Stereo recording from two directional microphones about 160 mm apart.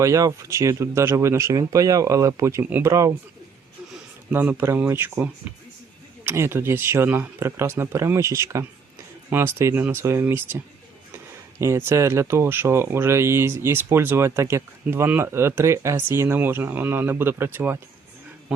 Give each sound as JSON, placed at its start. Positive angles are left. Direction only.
{"t": 0.0, "sound": "speech", "side_deg": -20}
{"t": 4.3, "sound": "speech", "side_deg": -10}
{"t": 11.6, "sound": "speech", "side_deg": -15}